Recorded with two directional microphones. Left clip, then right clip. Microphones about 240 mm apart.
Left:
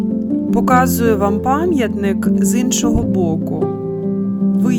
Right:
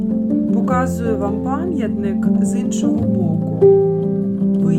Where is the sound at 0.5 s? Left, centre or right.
Left.